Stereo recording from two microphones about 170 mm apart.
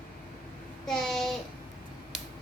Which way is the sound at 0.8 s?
Centre (ahead or behind).